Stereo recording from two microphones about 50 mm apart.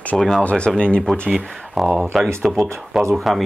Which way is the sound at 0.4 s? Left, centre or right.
Left.